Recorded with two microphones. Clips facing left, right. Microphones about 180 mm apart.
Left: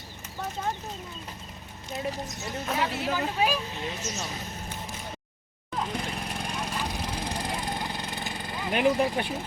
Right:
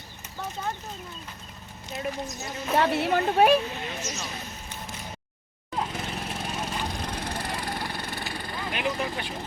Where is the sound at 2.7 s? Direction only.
65° right (ahead or behind).